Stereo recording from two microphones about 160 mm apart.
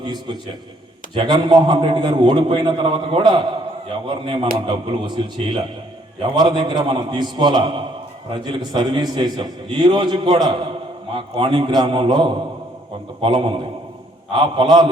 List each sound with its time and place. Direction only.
0.0 s a man's voice: 30° right (ahead or behind)